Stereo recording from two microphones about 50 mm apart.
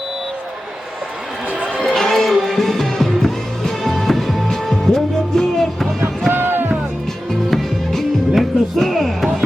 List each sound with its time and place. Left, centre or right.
1.8 s music: centre
6.3 s music: right
7.5 s music: centre